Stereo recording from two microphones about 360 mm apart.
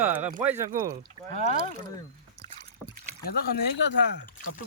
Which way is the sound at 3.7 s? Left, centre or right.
Left.